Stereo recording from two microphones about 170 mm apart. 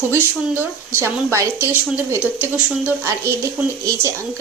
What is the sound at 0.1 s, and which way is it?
Speech, 10° right (ahead or behind).